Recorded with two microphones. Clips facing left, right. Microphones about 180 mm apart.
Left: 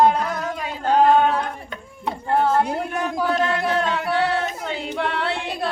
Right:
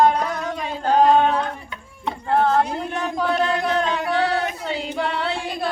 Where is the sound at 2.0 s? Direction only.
5° left (ahead or behind).